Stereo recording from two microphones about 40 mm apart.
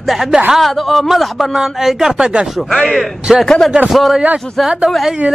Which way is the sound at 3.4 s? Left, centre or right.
Centre.